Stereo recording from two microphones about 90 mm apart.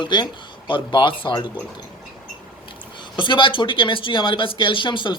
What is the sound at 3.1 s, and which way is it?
Speech, 65° left (ahead or behind).